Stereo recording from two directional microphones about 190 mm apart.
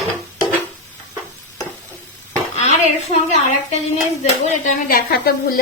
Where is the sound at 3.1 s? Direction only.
35° left (ahead or behind).